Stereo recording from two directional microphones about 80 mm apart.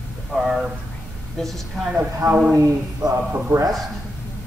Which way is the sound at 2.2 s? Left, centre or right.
Centre.